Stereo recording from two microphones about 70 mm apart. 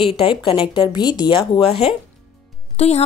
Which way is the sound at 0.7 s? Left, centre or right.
Left.